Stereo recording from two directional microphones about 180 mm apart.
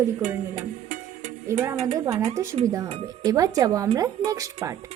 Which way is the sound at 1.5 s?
15° right (ahead or behind).